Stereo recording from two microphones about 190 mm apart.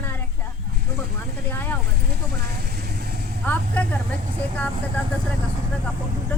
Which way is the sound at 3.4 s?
10° left (ahead or behind).